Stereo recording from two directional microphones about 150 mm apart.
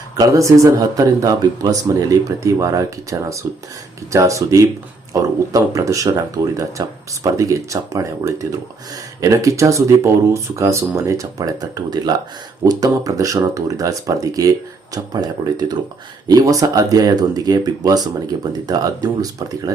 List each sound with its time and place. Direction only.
0.2 s speech: 20° right (ahead or behind)
19.2 s speech: 25° right (ahead or behind)